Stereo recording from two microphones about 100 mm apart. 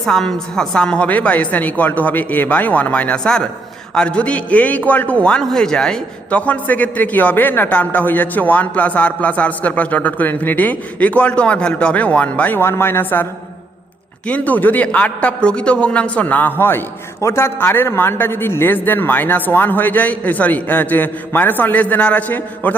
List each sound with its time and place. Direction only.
0.0 s a man's voice: 5° left (ahead or behind); by 13.2 s 20° left (ahead or behind)
14.3 s a man's voice: 15° left (ahead or behind)